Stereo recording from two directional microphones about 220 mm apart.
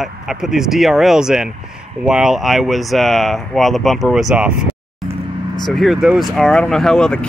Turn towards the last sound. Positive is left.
turn(degrees=5)  # may be behind; listen again after turning